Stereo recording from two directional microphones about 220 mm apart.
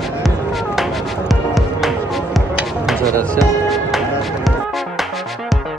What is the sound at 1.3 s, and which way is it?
Music, centre (ahead or behind).